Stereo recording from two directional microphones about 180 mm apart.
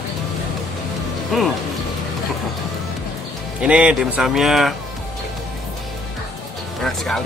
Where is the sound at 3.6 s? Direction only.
5° right (ahead or behind).